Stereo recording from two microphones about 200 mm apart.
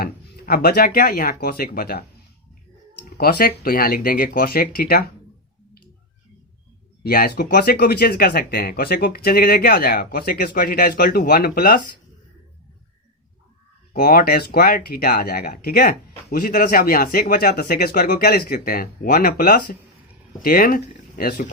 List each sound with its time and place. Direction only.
0.0 s speech: 50° left (ahead or behind)
3.2 s speech: 50° left (ahead or behind)
7.1 s speech: 45° left (ahead or behind)
13.9 s speech: 50° left (ahead or behind)